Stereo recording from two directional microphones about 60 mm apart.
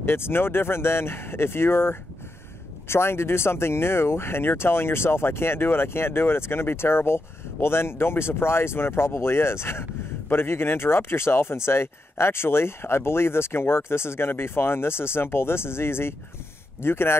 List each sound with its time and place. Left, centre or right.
0.0 s speech: left